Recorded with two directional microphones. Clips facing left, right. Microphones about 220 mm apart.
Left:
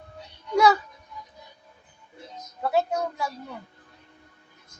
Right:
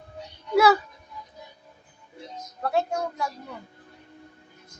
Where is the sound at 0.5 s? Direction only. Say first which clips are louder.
Right 1 dB; 5° right (ahead or behind).